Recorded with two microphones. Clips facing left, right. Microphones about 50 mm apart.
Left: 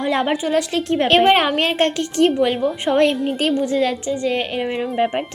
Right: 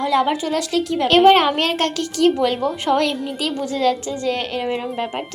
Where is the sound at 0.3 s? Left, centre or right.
Centre.